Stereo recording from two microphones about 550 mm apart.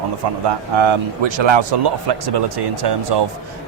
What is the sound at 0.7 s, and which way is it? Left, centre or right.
Speech, right.